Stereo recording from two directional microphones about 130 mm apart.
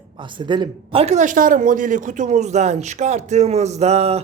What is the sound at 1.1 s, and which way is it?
A man's voice, 85° right.